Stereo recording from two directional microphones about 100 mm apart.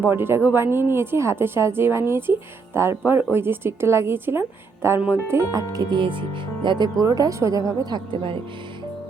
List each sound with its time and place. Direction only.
0.0 s a woman's voice: 20° right (ahead or behind)
5.3 s speech: 35° right (ahead or behind)
7.0 s speech: 35° right (ahead or behind); by 8.4 s 60° right (ahead or behind)